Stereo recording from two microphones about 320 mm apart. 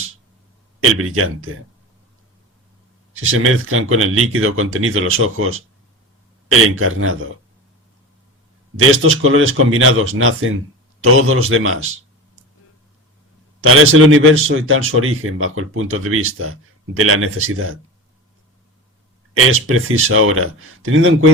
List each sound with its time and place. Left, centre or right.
0.9 s a man's voice: right
3.2 s a man's voice: right
8.7 s a man's voice: right
13.6 s a man's voice: right
19.3 s a man's voice: right